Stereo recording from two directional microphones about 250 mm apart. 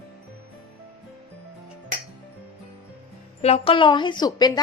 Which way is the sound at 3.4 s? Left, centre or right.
Left.